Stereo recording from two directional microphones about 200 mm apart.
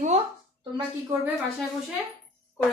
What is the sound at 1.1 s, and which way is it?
Speech, 15° right (ahead or behind).